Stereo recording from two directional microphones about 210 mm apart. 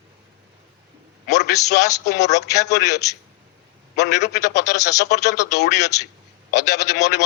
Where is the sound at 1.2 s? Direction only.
55° left (ahead or behind).